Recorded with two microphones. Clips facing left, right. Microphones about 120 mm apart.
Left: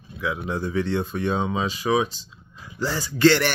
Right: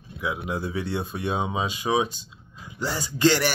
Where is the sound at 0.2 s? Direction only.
15° right (ahead or behind).